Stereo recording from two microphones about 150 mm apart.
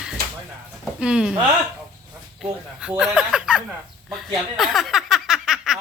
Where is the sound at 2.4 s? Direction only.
5° right (ahead or behind).